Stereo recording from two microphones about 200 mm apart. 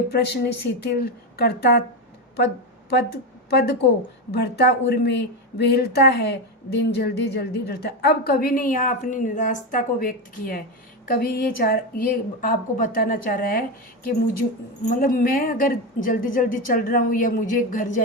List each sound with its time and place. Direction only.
0.1 s a woman's voice: 55° left (ahead or behind)
2.9 s a woman's voice: 55° left (ahead or behind)
14.8 s a woman's voice: 45° left (ahead or behind)